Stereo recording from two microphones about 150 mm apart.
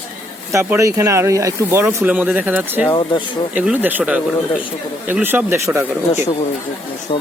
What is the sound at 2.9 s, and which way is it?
Speech, 30° left (ahead or behind).